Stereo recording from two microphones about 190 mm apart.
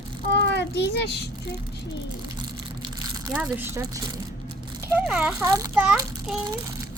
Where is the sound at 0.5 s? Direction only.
65° left (ahead or behind).